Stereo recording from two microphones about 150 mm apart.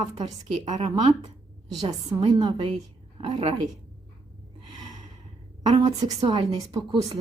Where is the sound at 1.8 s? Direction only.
25° right (ahead or behind).